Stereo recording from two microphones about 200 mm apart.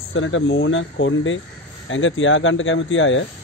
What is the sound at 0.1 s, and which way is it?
Speech, 75° left (ahead or behind).